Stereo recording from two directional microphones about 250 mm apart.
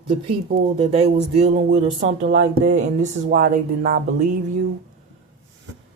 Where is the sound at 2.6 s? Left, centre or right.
Right.